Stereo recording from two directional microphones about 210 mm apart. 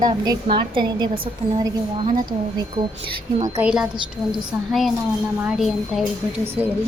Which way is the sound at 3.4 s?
15° right (ahead or behind).